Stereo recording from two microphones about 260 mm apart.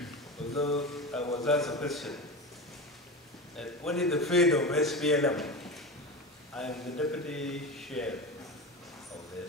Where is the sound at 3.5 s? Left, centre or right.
Centre.